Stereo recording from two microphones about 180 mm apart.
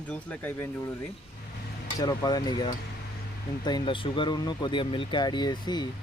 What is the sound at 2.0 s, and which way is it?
Speech, 20° left (ahead or behind).